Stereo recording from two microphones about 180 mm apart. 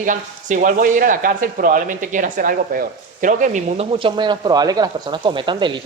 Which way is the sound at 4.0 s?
25° right (ahead or behind).